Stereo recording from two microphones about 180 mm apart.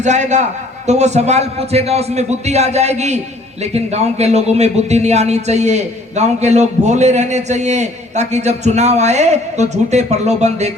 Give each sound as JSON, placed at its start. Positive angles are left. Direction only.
{"t": 0.0, "sound": "speech", "side_deg": -40}